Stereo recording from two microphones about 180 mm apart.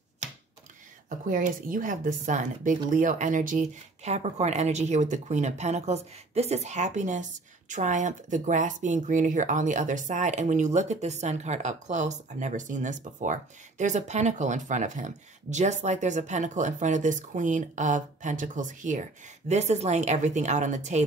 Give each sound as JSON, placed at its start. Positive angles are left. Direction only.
{"t": 1.2, "sound": "speech", "side_deg": -50}